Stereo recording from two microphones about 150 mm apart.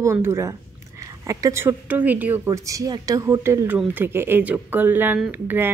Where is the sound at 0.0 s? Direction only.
20° right (ahead or behind).